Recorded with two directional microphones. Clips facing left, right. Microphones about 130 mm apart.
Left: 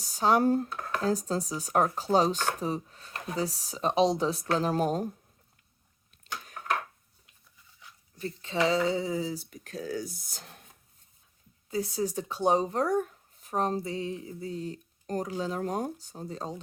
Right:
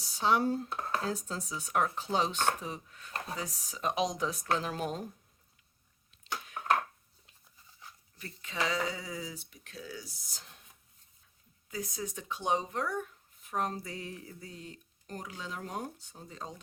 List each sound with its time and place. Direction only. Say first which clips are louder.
0.0 s speech: left 5 dB; 45° left (ahead or behind)
0.7 s a sound: even; 25° right (ahead or behind)
1.0 s speech: left 8 dB; 35° left (ahead or behind)
8.2 s speech: left 8 dB; 30° left (ahead or behind)
9.5 s speech: left 10 dB; 45° left (ahead or behind)
11.7 s speech: left 9 dB; 30° left (ahead or behind)